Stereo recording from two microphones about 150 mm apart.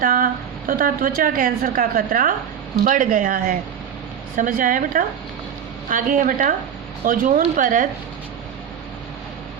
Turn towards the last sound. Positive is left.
turn(degrees=-60)  # may be behind; listen again after turning